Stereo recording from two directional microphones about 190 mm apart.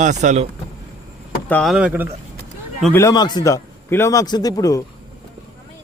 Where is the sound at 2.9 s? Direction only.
20° left (ahead or behind).